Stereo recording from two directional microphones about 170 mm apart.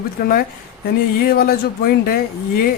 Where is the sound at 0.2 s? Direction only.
60° left (ahead or behind).